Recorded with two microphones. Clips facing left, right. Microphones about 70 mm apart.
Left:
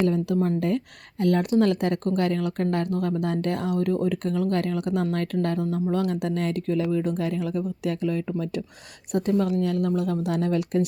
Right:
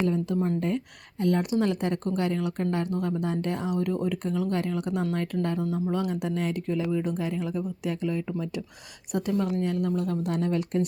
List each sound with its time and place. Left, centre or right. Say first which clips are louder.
0.0 s speech: left 3 dB; left
0.4 s speech: left 3 dB; left
1.2 s speech: left 4 dB; left
9.4 s speech: left 3 dB; left